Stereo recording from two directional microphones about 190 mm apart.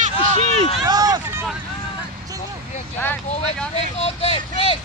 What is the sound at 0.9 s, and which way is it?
Hubbub, 20° right (ahead or behind).